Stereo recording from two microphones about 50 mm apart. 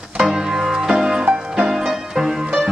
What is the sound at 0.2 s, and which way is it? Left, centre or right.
Music, centre.